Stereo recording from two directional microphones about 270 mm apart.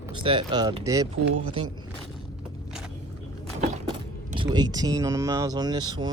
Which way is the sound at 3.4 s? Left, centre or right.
Right.